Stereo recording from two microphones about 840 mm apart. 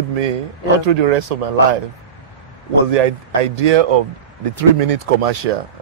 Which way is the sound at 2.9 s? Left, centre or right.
Right.